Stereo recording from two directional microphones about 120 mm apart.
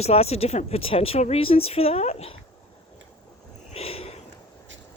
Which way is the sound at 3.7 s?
55° left (ahead or behind).